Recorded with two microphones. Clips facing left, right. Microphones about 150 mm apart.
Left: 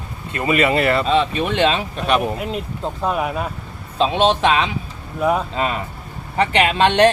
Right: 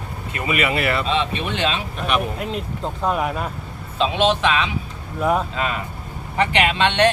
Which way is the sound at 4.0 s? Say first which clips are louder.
Left 2 dB; 35° left (ahead or behind).